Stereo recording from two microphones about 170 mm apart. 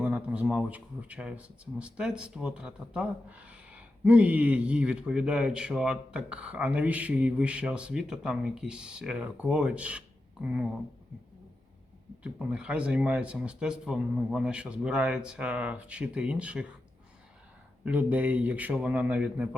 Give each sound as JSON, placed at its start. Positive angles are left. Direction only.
{"t": 0.0, "sound": "speech", "side_deg": -5}
{"t": 12.2, "sound": "speech", "side_deg": -5}
{"t": 17.8, "sound": "speech", "side_deg": -10}